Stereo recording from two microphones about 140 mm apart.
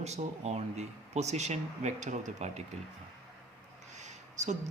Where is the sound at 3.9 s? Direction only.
55° right (ahead or behind).